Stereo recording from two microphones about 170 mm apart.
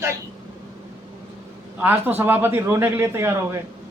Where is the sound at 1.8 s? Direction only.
10° right (ahead or behind).